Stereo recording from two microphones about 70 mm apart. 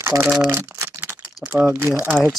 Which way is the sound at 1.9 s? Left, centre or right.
Right.